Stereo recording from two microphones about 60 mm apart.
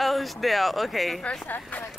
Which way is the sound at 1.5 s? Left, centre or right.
Left.